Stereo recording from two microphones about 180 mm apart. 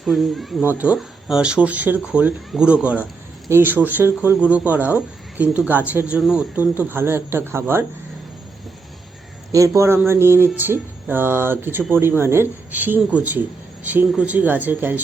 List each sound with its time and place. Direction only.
0.0 s speech: centre (ahead or behind)
9.5 s speech: 15° right (ahead or behind)